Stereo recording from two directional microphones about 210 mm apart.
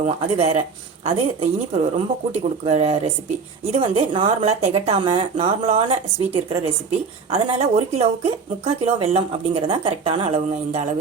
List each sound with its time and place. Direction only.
0.0 s speech: 30° right (ahead or behind)